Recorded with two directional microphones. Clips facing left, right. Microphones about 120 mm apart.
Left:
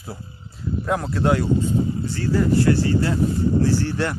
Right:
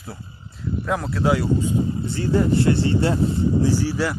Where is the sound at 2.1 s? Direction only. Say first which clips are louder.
Even; 20° right (ahead or behind); by 4.2 s 5° right (ahead or behind).